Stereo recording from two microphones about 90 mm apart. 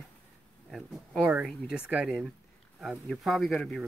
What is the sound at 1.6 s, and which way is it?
Speech, 10° right (ahead or behind).